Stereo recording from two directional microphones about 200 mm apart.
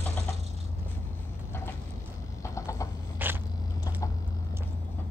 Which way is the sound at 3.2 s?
10° right (ahead or behind).